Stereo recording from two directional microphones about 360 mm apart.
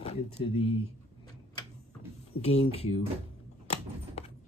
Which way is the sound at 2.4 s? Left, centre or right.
Centre.